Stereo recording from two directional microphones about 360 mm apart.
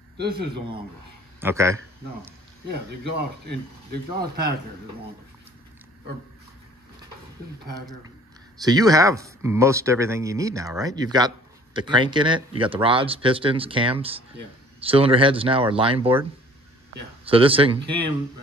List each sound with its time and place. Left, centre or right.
1.4 s speech: centre
3.2 s speech: right
8.5 s speech: centre